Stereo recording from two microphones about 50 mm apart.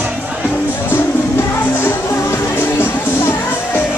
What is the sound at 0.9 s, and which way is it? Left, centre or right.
Music, left.